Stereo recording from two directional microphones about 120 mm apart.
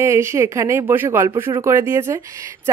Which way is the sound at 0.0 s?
25° right (ahead or behind).